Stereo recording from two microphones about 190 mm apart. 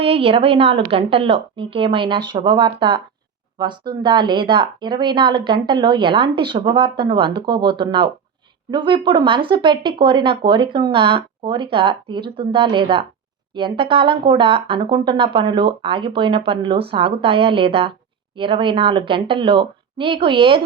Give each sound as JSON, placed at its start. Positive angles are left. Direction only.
{"t": 0.0, "sound": "speech", "side_deg": -30}